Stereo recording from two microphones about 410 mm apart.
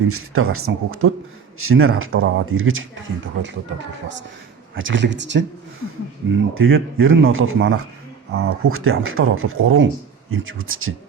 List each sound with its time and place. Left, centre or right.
0.0 s speech: right
4.7 s speech: right